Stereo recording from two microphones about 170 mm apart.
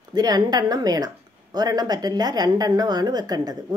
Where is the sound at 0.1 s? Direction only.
25° right (ahead or behind).